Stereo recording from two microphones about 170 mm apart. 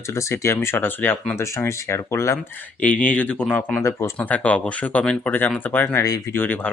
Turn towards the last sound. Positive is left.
turn(degrees=10)  # may be behind; listen again after turning